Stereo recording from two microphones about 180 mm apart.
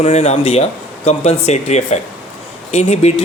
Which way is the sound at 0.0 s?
35° left (ahead or behind).